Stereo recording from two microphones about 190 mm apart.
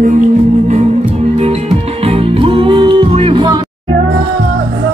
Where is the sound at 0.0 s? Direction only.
45° right (ahead or behind); by 3.6 s 25° right (ahead or behind).